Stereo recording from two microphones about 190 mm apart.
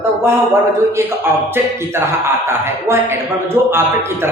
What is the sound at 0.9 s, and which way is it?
A man's voice, 10° right (ahead or behind).